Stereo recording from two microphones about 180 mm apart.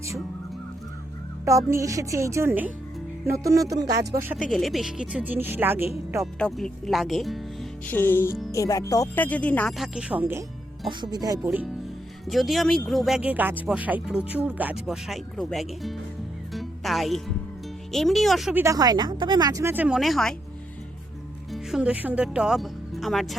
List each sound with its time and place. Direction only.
1.5 s speech: 15° right (ahead or behind)
4.2 s speech: 5° right (ahead or behind)
6.4 s speech: centre (ahead or behind)
7.9 s speech: 10° left (ahead or behind)
9.7 s speech: 5° right (ahead or behind)
10.8 s speech: 25° right (ahead or behind)
12.2 s speech: centre (ahead or behind)
16.5 s music: centre (ahead or behind)
17.9 s speech: centre (ahead or behind)
18.6 s speech: 20° right (ahead or behind); by 20.3 s centre (ahead or behind)
21.5 s speech: 5° right (ahead or behind)